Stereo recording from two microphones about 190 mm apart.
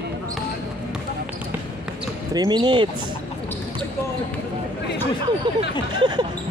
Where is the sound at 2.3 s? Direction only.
20° right (ahead or behind).